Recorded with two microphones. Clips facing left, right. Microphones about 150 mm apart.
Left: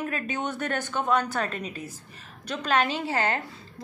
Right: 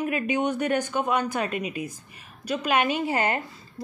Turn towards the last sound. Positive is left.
turn(degrees=-15)  # may be behind; listen again after turning